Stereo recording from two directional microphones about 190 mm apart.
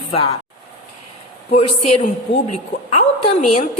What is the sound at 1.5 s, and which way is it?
Speech, 35° left (ahead or behind).